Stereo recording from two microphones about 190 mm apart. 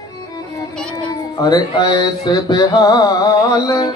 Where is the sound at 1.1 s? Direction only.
20° left (ahead or behind).